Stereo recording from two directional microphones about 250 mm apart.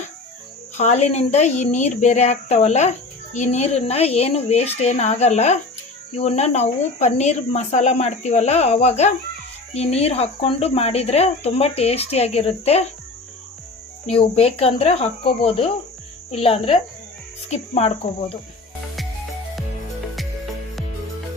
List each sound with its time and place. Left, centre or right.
0.8 s speech: left
14.1 s speech: left